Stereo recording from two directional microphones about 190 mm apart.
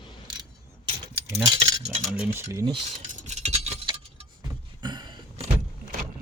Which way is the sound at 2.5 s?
25° right (ahead or behind).